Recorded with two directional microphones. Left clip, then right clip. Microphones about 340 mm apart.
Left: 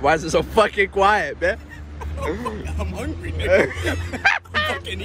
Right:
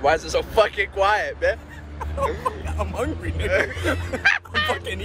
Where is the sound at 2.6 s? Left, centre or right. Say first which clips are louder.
Right 4 dB; centre.